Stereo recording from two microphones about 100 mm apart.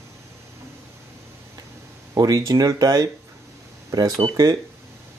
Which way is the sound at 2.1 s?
35° right (ahead or behind).